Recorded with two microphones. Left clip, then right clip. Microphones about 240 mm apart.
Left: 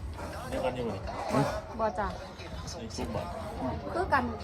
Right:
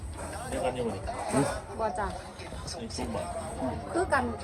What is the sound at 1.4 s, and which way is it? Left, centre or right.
Speech, right.